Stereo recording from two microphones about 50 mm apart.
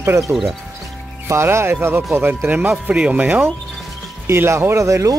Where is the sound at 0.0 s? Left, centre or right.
Right.